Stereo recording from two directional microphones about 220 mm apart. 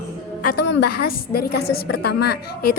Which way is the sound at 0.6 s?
45° left (ahead or behind).